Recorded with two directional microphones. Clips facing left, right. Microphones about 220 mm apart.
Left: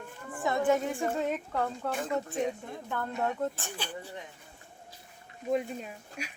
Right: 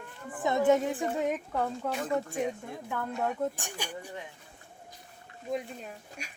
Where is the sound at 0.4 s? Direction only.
20° right (ahead or behind); by 3.5 s centre (ahead or behind).